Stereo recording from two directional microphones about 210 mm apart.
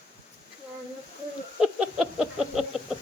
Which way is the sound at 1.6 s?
5° right (ahead or behind).